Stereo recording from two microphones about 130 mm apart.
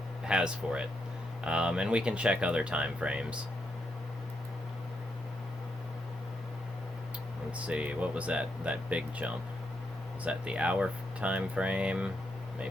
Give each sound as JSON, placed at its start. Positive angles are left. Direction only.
{"t": 0.3, "sound": "speech", "side_deg": -5}
{"t": 7.6, "sound": "speech", "side_deg": -10}